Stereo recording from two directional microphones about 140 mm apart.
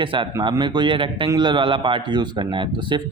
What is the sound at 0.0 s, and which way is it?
A man's voice, 35° right (ahead or behind).